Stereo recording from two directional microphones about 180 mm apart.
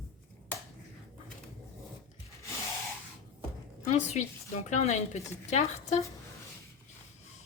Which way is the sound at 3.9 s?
40° left (ahead or behind).